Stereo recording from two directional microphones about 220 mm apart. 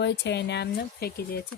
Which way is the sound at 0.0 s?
50° left (ahead or behind).